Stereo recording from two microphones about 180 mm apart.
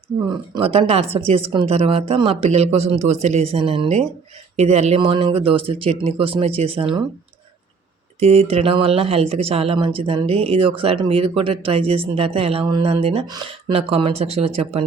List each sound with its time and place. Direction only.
0.3 s speech: 30° right (ahead or behind)
8.2 s speech: 35° right (ahead or behind)